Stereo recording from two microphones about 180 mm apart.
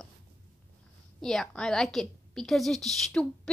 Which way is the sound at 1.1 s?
Centre (ahead or behind).